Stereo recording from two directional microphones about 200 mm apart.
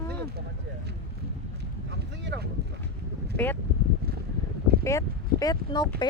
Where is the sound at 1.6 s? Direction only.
60° right (ahead or behind).